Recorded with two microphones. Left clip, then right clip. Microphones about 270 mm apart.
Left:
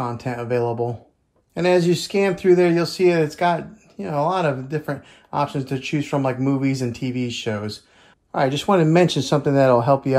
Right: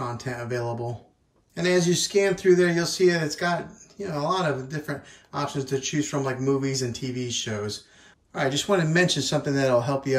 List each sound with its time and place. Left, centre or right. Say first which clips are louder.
0.0 s speech: left 5 dB; centre